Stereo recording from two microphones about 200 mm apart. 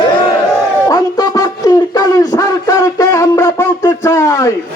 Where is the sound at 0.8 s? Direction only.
20° left (ahead or behind).